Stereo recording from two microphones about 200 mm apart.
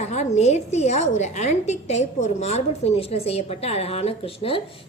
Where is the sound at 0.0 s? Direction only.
35° left (ahead or behind).